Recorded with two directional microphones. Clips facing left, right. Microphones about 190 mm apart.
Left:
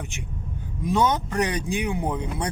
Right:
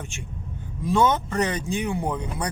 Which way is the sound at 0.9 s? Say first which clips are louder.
Right 1 dB; 15° left (ahead or behind).